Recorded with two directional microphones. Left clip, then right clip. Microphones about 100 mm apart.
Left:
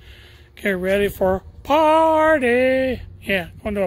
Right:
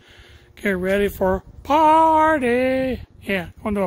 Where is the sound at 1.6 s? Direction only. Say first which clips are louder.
Right 1 dB; 25° right (ahead or behind).